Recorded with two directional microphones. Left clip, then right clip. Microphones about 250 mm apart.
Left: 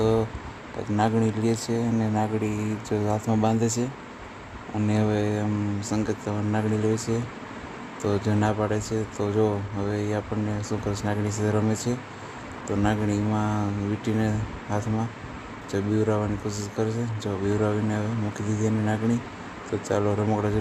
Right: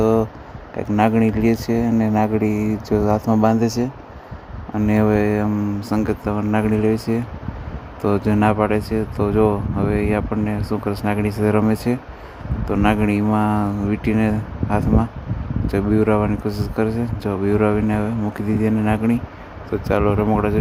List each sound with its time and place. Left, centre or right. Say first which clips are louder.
0.0 s a sound: right 6 dB; right
0.9 s speech: right 7 dB; right
4.8 s speech: right 8 dB; right